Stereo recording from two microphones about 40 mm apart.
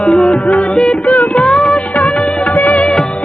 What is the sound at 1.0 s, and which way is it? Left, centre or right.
Music of bollywood, left.